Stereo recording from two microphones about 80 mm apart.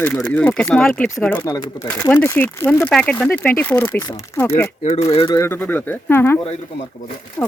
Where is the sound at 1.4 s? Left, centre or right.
Left.